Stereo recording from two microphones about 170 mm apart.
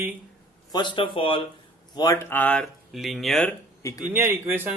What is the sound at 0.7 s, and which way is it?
A man's voice, 25° left (ahead or behind).